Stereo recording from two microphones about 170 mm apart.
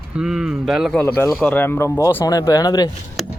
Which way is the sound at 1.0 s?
10° left (ahead or behind).